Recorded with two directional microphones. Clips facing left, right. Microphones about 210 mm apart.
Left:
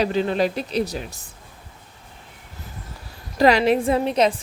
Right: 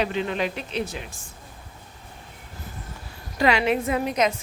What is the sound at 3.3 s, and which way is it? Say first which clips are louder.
A woman's voice: left 5 dB; 35° left (ahead or behind).